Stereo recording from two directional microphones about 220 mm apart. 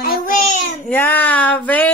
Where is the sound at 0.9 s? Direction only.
10° left (ahead or behind).